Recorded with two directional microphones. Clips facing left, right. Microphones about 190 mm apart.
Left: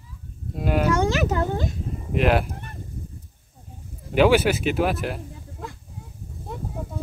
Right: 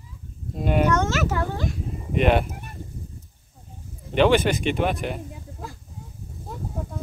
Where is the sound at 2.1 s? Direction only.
Centre (ahead or behind).